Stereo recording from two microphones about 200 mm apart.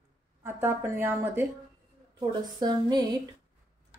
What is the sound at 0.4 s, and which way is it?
A woman's voice, 10° right (ahead or behind).